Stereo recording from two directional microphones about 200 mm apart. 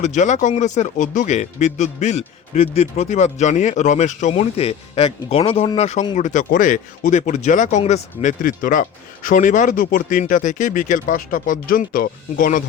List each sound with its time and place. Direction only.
0.0 s speech: 35° left (ahead or behind)